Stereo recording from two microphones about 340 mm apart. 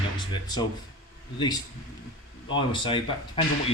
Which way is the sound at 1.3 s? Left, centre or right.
Centre.